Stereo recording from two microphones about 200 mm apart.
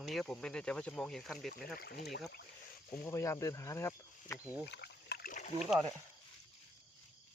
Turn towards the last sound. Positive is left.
turn(degrees=0)  # may be behind; listen again after turning